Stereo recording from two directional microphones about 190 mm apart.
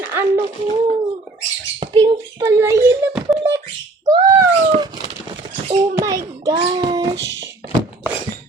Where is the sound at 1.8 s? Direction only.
25° right (ahead or behind).